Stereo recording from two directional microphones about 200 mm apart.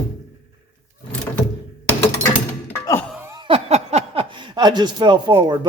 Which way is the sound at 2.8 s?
15° left (ahead or behind).